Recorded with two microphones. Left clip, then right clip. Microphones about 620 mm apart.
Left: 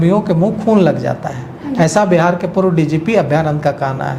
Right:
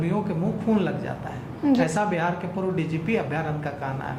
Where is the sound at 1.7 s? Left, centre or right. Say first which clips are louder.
Left 15 dB; left.